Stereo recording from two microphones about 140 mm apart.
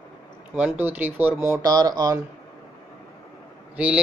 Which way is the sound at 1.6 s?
30° right (ahead or behind).